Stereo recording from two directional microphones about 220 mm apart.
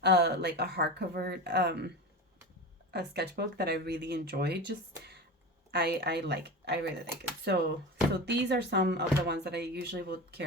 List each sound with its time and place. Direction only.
0.0 s speech: 50° right (ahead or behind)
2.9 s speech: 45° right (ahead or behind)